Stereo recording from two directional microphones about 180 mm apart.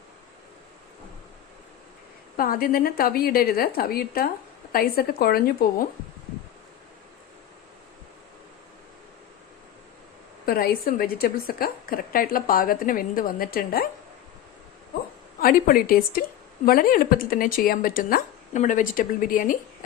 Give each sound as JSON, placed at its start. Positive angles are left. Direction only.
{"t": 2.3, "sound": "a woman's voice", "side_deg": 55}
{"t": 10.4, "sound": "a woman's voice", "side_deg": 55}
{"t": 15.4, "sound": "a woman's voice", "side_deg": 55}